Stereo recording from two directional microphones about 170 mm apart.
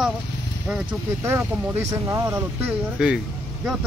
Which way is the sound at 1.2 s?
15° right (ahead or behind).